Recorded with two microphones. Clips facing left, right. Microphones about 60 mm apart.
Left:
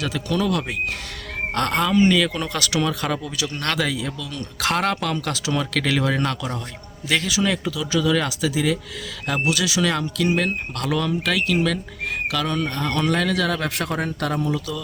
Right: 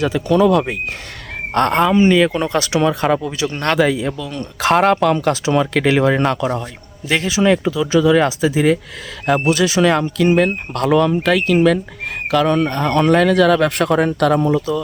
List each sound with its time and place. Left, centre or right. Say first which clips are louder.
0.0 s speech: right 9 dB; right
14.4 s speech: right 8 dB; right